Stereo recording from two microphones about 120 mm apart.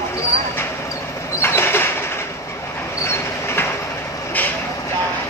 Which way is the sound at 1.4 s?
20° left (ahead or behind).